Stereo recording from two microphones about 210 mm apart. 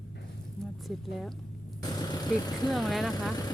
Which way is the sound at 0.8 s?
Centre (ahead or behind).